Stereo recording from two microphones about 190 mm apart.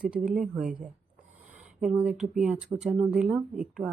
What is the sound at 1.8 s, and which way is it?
Speech, 5° right (ahead or behind).